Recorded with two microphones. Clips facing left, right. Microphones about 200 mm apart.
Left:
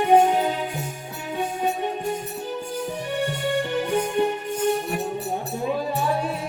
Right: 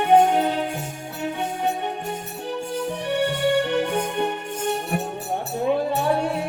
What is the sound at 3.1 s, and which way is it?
Music, 65° right (ahead or behind).